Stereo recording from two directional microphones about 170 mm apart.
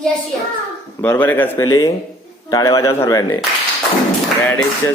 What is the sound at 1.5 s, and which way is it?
Speech, 20° left (ahead or behind).